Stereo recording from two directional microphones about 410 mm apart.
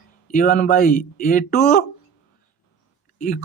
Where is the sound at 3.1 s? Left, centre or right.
Centre.